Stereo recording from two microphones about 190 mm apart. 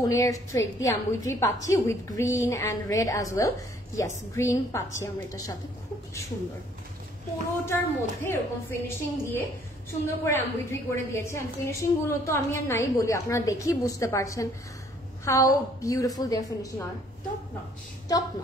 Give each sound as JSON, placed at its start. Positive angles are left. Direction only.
{"t": 0.1, "sound": "a woman's voice", "side_deg": 15}
{"t": 7.6, "sound": "a woman's voice", "side_deg": 10}
{"t": 18.1, "sound": "a woman's voice", "side_deg": 20}